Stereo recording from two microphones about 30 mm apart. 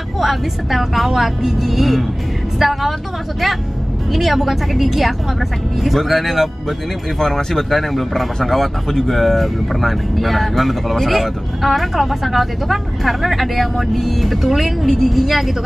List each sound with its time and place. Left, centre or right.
0.2 s speech: centre
4.1 s speech: centre
7.2 s speech: centre
7.9 s speech: centre